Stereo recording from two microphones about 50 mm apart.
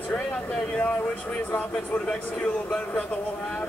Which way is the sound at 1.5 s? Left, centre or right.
Left.